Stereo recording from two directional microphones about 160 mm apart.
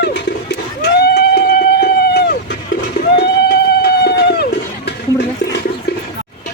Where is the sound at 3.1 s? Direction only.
85° left.